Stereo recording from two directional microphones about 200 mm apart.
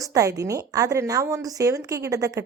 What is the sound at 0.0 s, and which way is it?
A woman's voice, 15° right (ahead or behind).